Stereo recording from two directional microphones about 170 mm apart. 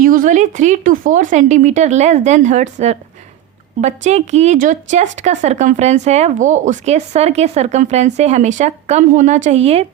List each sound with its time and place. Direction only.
0.0 s speech: 55° right (ahead or behind); by 9.8 s 40° right (ahead or behind)